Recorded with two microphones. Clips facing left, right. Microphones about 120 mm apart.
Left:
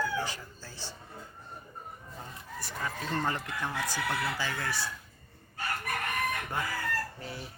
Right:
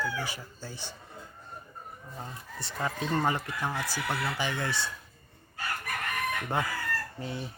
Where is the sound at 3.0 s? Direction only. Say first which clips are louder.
Right 4 dB; 15° right (ahead or behind).